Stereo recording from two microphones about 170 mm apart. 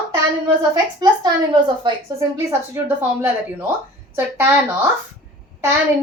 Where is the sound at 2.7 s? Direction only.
15° right (ahead or behind).